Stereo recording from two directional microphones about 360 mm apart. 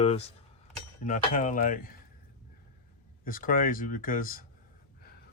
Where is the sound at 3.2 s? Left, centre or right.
Left.